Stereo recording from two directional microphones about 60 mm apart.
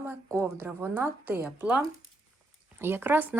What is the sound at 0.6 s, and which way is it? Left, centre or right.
Speech, right.